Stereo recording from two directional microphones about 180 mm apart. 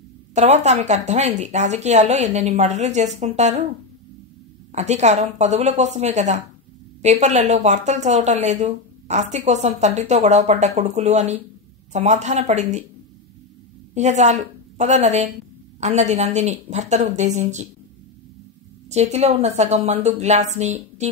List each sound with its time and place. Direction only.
0.3 s a woman's voice: 40° right (ahead or behind)
4.7 s a woman's voice: 40° right (ahead or behind)
13.9 s a woman's voice: 40° right (ahead or behind)
18.9 s a woman's voice: 40° right (ahead or behind)